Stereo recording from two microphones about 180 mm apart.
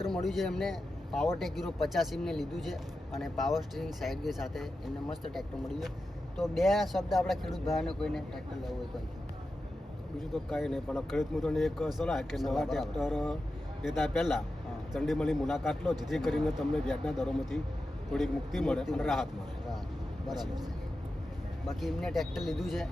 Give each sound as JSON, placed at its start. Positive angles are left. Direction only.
{"t": 0.0, "sound": "speech", "side_deg": 0}
{"t": 10.2, "sound": "speech", "side_deg": 0}
{"t": 18.1, "sound": "speech", "side_deg": 0}
{"t": 20.2, "sound": "speech", "side_deg": -20}
{"t": 21.7, "sound": "speech", "side_deg": 0}